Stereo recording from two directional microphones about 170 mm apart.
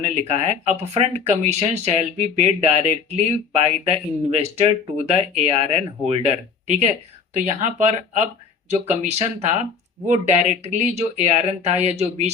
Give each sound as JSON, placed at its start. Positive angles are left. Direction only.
{"t": 0.1, "sound": "speech", "side_deg": -40}